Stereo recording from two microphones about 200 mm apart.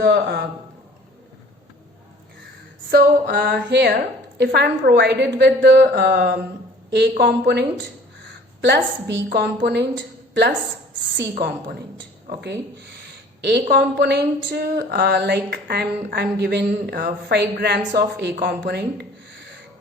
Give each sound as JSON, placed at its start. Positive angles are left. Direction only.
{"t": 0.0, "sound": "speech", "side_deg": -55}
{"t": 2.9, "sound": "a woman's voice", "side_deg": -50}
{"t": 11.2, "sound": "a woman's voice", "side_deg": -50}